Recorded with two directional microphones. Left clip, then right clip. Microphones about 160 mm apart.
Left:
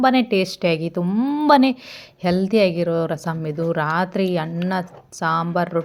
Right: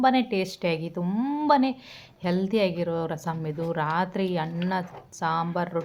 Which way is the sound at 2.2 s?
30° left (ahead or behind).